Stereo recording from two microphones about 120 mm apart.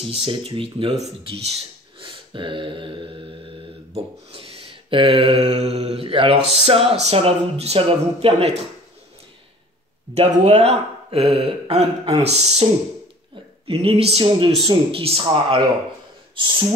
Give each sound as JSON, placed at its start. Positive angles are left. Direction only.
{"t": 0.0, "sound": "mantra", "side_deg": -50}
{"t": 2.0, "sound": "mantra", "side_deg": -45}
{"t": 10.1, "sound": "speech", "side_deg": -60}
{"t": 13.7, "sound": "mantra", "side_deg": -50}